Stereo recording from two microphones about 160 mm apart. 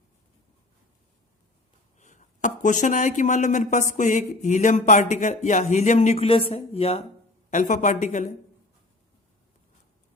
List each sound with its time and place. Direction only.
2.0 s speech: 50° left (ahead or behind)
7.5 s speech: 55° left (ahead or behind)